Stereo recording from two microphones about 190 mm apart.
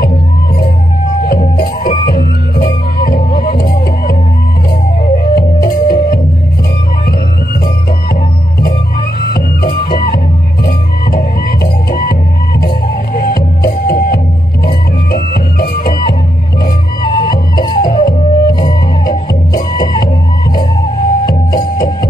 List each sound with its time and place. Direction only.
1.6 s music: 50° left (ahead or behind)
9.6 s music: 50° left (ahead or behind)
17.0 s music: 25° left (ahead or behind)